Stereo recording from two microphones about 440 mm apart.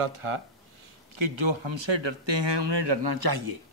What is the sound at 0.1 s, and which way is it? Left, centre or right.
Speech, right.